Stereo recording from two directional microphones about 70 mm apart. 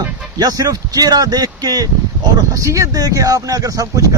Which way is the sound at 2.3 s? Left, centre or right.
Right.